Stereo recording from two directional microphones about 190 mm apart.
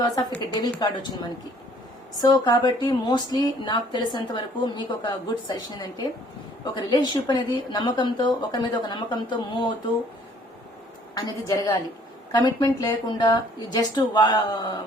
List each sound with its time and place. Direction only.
0.0 s a woman's voice: 20° left (ahead or behind)
2.2 s a woman's voice: 20° left (ahead or behind)
11.3 s a woman's voice: 20° left (ahead or behind)